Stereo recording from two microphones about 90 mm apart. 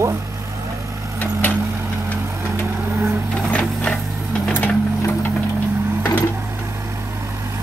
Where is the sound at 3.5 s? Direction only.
15° left (ahead or behind).